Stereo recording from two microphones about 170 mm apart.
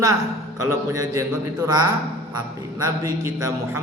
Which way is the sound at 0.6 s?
20° right (ahead or behind).